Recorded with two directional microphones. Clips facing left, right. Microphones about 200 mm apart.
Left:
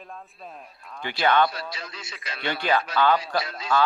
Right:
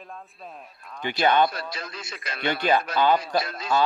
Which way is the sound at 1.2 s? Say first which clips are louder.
Right 1 dB; 15° right (ahead or behind).